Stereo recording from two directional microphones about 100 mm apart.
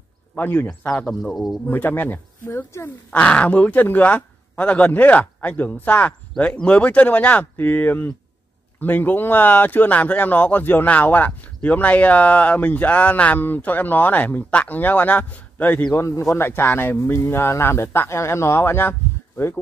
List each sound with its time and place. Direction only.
0.4 s speech: 20° left (ahead or behind)
0.7 s speech: 5° left (ahead or behind)
1.7 s speech: 20° left (ahead or behind)
3.1 s speech: 10° left (ahead or behind)
15.9 s speech: 25° left (ahead or behind)